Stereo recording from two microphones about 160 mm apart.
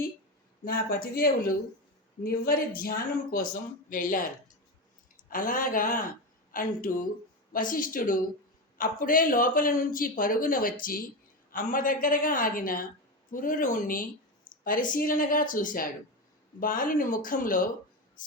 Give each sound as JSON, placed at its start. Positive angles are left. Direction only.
{"t": 0.6, "sound": "speech", "side_deg": 70}
{"t": 5.3, "sound": "a woman's voice", "side_deg": 60}